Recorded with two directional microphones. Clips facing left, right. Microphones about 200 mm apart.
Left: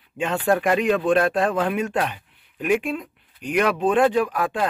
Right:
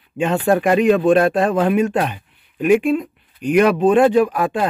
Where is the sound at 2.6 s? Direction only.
15° right (ahead or behind).